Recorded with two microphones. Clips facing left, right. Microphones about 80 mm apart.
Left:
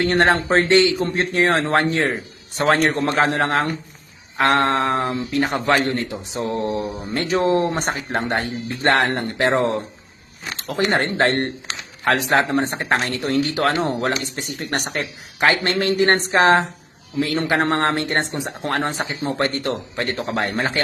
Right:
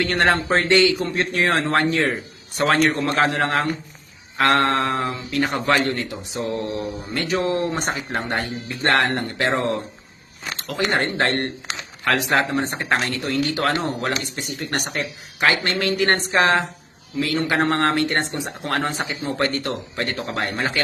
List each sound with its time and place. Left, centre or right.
0.0 s speech: left
7.7 s speech: left
8.1 s speech: left